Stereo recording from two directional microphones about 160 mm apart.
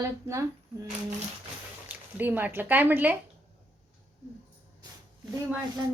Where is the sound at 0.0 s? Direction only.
20° right (ahead or behind).